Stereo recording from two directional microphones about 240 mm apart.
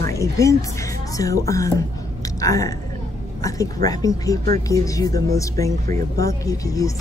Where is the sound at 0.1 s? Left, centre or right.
Centre.